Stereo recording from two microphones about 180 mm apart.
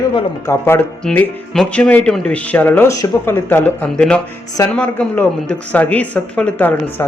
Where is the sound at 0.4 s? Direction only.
15° left (ahead or behind).